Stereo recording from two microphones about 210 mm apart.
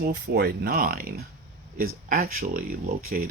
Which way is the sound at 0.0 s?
50° right (ahead or behind).